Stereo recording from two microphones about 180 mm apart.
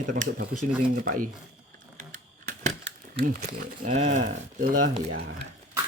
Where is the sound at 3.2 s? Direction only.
45° right (ahead or behind).